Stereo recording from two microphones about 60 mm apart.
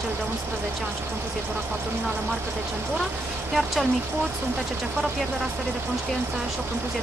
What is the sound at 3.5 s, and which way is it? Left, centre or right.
Speech, centre.